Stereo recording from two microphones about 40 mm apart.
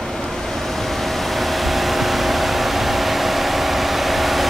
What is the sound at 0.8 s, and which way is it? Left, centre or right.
Vehicle, centre.